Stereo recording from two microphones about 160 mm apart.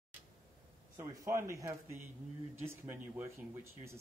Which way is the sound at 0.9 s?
20° right (ahead or behind).